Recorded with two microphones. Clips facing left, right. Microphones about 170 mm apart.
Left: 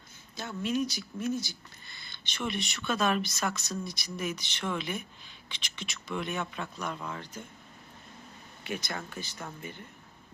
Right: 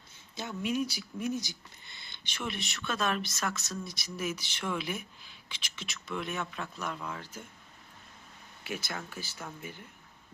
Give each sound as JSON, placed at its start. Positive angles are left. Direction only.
{"t": 0.3, "sound": "speech", "side_deg": -10}
{"t": 2.2, "sound": "speech", "side_deg": -5}
{"t": 8.6, "sound": "speech", "side_deg": -5}